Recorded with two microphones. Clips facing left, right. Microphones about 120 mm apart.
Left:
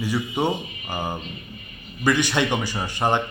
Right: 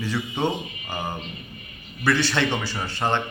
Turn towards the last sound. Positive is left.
turn(degrees=15)  # may be behind; listen again after turning